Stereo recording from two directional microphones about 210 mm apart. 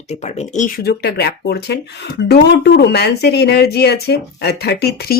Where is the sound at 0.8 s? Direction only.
50° left (ahead or behind).